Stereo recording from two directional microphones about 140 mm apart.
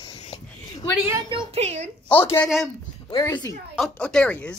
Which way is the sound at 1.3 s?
40° right (ahead or behind).